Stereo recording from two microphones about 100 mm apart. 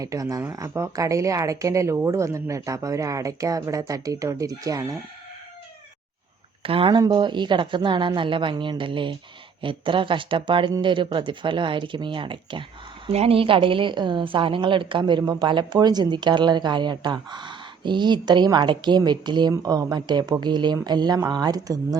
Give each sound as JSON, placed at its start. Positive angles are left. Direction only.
{"t": 0.0, "sound": "speech", "side_deg": -35}
{"t": 6.6, "sound": "speech", "side_deg": -65}
{"t": 7.0, "sound": "a woman's voice", "side_deg": -50}
{"t": 13.1, "sound": "a woman's voice", "side_deg": -75}